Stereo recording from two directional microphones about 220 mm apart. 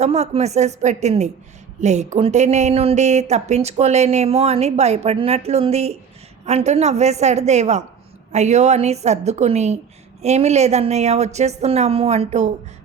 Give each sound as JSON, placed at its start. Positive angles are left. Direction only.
{"t": 0.0, "sound": "a woman's voice", "side_deg": -30}